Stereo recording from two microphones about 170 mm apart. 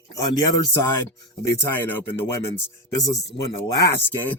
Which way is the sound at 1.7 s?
10° left (ahead or behind).